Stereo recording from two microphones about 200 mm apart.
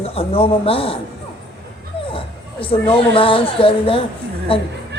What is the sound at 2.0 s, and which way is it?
Speech, 25° left (ahead or behind).